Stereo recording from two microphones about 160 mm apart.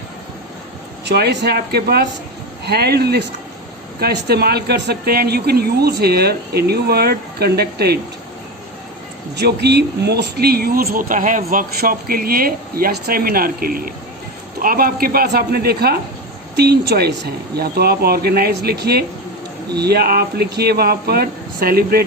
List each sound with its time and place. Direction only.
1.0 s speech: 90° right
9.3 s speech: 90° right; by 22.0 s 75° right (ahead or behind)